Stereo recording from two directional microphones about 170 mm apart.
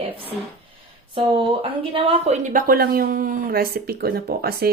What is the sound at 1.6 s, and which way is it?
A woman's voice, 35° right (ahead or behind).